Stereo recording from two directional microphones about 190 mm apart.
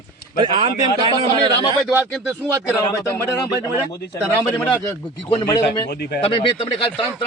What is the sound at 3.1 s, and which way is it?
Speech, 20° left (ahead or behind).